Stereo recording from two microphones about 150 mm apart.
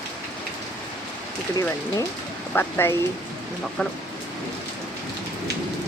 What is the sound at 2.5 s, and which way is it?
Speech, 15° left (ahead or behind).